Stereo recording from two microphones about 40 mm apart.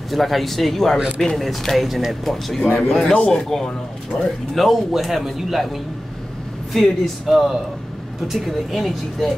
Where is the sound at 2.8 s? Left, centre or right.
Centre.